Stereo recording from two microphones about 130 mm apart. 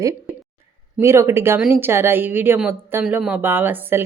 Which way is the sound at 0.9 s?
20° right (ahead or behind).